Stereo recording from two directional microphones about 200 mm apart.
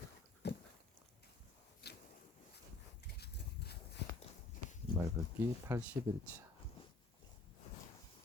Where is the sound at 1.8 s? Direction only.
55° left (ahead or behind).